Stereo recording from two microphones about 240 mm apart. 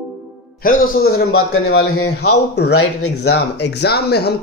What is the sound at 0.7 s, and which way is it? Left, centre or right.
Speech, left.